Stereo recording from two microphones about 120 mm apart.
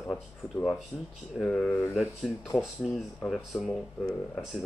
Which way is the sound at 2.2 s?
Centre (ahead or behind).